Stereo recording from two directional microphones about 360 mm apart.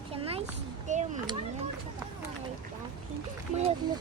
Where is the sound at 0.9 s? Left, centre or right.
Centre.